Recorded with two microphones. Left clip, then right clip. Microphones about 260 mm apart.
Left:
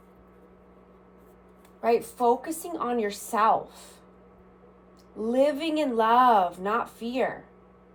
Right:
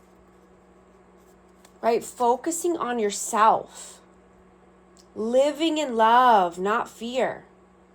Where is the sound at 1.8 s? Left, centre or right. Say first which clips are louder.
Right 1 dB; right.